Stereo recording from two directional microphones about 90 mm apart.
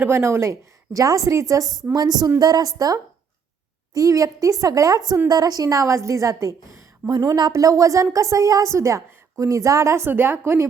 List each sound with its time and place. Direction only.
0.0 s a woman's voice: 25° right (ahead or behind)
7.0 s a woman's voice: 20° right (ahead or behind)
7.3 s a woman's voice: 45° right (ahead or behind); by 10.7 s 25° right (ahead or behind)